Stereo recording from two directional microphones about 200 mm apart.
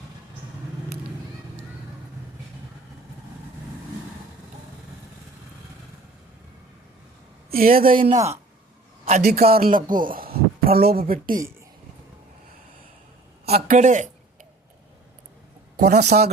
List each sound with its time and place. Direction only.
7.5 s speech: 45° right (ahead or behind)
7.9 s speech: 30° right (ahead or behind)
9.2 s speech: 50° right (ahead or behind)
13.4 s a man's voice: 50° right (ahead or behind)
13.7 s speech: 35° right (ahead or behind)
15.8 s speech: 55° right (ahead or behind)